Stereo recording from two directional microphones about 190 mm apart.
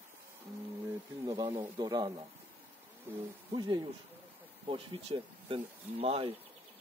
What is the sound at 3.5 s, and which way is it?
A man's voice, 20° right (ahead or behind).